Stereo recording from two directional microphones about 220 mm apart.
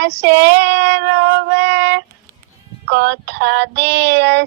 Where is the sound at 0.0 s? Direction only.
55° right (ahead or behind).